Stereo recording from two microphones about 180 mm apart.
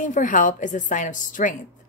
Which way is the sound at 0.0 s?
45° left (ahead or behind).